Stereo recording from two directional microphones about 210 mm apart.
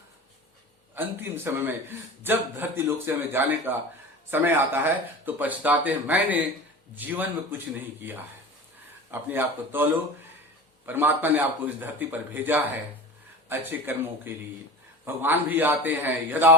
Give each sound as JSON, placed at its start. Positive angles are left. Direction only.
{"t": 0.9, "sound": "a man's voice", "side_deg": -10}
{"t": 9.3, "sound": "a man's voice", "side_deg": -10}
{"t": 10.8, "sound": "a man's voice", "side_deg": -10}